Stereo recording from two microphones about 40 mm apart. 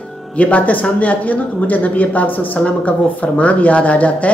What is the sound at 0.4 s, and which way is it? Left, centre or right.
Speech, left.